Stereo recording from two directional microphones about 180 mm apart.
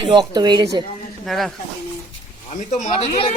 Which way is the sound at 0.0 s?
25° right (ahead or behind).